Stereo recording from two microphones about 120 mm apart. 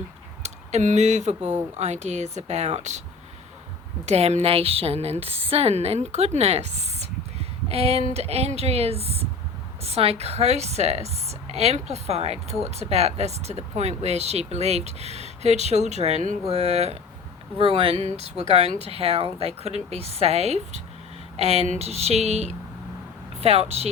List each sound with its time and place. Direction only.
0.4 s a woman's voice: 80° right
4.0 s a woman's voice: 65° right (ahead or behind)
17.6 s speech: 50° right (ahead or behind)
18.0 s a woman's voice: 65° right (ahead or behind)